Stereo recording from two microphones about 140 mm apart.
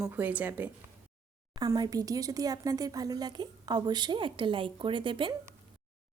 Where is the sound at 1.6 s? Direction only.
30° right (ahead or behind).